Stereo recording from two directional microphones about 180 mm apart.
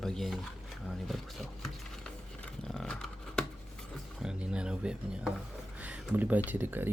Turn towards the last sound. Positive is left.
turn(degrees=-10)  # may be behind; listen again after turning